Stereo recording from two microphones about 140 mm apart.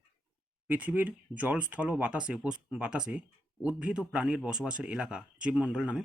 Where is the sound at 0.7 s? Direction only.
10° right (ahead or behind).